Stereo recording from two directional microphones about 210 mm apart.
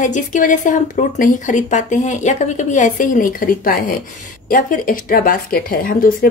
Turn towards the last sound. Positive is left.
turn(degrees=45)  # may be behind; listen again after turning